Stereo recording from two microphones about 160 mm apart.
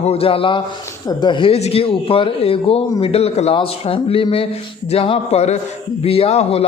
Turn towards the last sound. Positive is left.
turn(degrees=40)  # may be behind; listen again after turning